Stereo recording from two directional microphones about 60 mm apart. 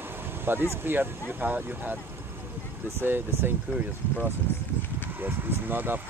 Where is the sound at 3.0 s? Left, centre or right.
Right.